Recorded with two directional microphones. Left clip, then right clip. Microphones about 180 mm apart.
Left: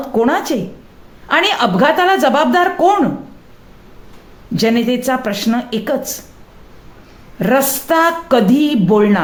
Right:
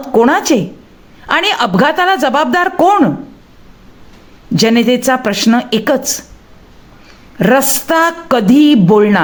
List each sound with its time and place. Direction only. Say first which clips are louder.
0.1 s speech: right 6 dB; 30° right (ahead or behind)
4.5 s speech: right 4 dB; 30° right (ahead or behind)
7.3 s speech: right 3 dB; 25° right (ahead or behind)